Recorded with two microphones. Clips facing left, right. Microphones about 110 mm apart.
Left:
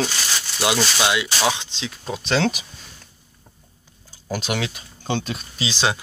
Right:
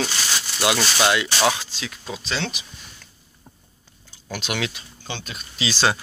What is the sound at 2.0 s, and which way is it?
Speech, 55° left (ahead or behind).